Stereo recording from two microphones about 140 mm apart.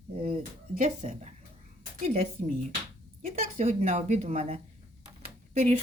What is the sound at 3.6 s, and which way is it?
Speech, 50° right (ahead or behind).